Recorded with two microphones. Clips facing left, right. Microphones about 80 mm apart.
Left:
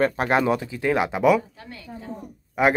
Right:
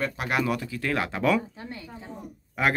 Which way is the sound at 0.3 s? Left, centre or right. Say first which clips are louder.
Left 6 dB; left.